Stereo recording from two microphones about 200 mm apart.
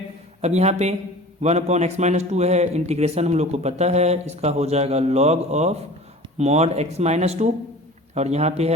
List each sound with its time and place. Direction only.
0.4 s speech: 35° right (ahead or behind)